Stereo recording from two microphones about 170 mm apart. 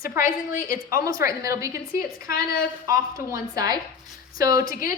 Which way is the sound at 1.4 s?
20° right (ahead or behind).